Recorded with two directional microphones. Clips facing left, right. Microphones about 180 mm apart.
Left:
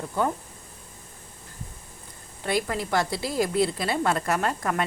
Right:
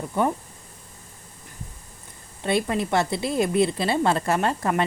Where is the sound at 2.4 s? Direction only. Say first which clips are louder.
Right 3 dB; 25° right (ahead or behind).